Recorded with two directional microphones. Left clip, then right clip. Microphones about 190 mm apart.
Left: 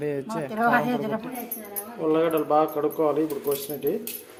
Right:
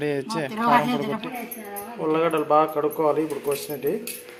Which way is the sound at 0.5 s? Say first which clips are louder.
Right 2 dB; 40° left (ahead or behind).